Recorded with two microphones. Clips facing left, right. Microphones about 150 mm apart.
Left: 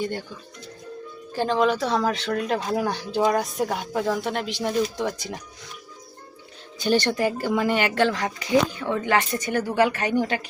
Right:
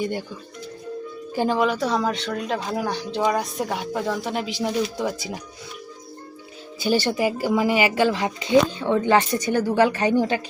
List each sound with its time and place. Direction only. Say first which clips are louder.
0.0 s speech: right 2 dB; 10° right (ahead or behind)
1.3 s speech: even; 10° right (ahead or behind)
6.7 s speech: even; 5° right (ahead or behind)
8.1 s speech: right 3 dB; 25° right (ahead or behind)